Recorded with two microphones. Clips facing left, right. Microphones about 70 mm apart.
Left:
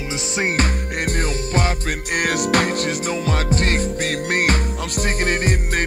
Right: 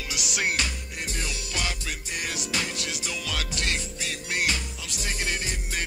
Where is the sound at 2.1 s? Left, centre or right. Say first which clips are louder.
Left 13 dB; left.